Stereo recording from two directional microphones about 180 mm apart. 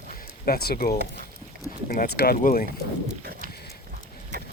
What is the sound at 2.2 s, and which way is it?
Speech, 60° left (ahead or behind).